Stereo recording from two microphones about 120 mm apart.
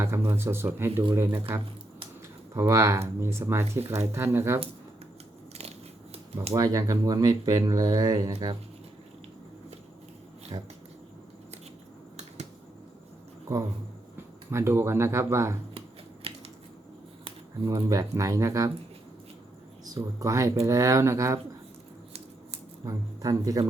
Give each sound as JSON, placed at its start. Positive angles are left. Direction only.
{"t": 0.0, "sound": "speech", "side_deg": -20}
{"t": 6.5, "sound": "speech", "side_deg": -30}
{"t": 10.5, "sound": "speech", "side_deg": -35}
{"t": 14.5, "sound": "speech", "side_deg": -20}
{"t": 16.3, "sound": "a sound", "side_deg": -50}
{"t": 17.7, "sound": "speech", "side_deg": -30}
{"t": 19.8, "sound": "speech", "side_deg": -30}
{"t": 22.9, "sound": "speech", "side_deg": -30}